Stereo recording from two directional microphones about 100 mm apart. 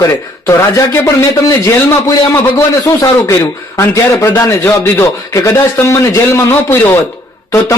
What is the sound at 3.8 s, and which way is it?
A man's voice, 25° left (ahead or behind).